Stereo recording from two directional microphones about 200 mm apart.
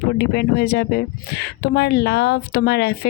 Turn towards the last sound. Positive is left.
turn(degrees=55)  # may be behind; listen again after turning